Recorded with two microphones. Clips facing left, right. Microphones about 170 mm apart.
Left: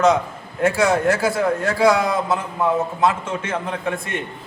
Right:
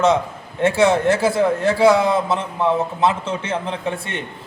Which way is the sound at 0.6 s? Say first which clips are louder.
Right 2 dB; 25° right (ahead or behind).